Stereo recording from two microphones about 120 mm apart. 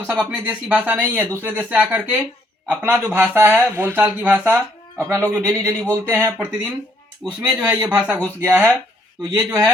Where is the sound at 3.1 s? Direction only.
20° right (ahead or behind).